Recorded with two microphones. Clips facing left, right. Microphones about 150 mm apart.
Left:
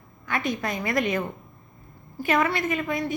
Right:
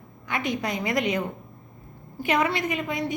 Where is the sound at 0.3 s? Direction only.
20° right (ahead or behind).